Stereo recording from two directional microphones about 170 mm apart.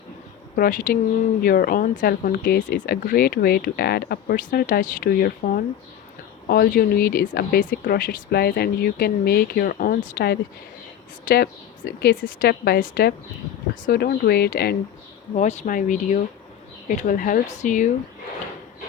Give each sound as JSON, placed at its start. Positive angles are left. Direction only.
{"t": 0.5, "sound": "speech", "side_deg": 55}
{"t": 11.9, "sound": "a woman's voice", "side_deg": 65}
{"t": 15.4, "sound": "speech", "side_deg": 45}